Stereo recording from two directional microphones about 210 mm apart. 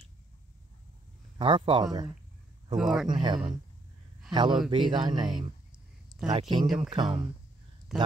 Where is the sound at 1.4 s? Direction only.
25° right (ahead or behind).